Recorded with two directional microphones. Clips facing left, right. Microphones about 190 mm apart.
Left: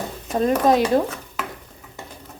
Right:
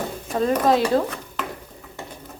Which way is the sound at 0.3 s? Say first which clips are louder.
Left 2 dB; 20° left (ahead or behind).